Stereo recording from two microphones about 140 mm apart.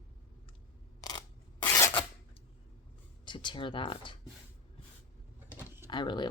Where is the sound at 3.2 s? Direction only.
35° left (ahead or behind).